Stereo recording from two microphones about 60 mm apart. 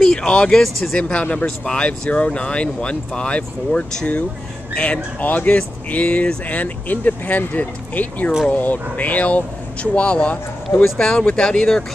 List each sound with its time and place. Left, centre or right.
0.0 s a sound: centre
0.6 s speech: centre
0.9 s speech: left
11.0 s speech: centre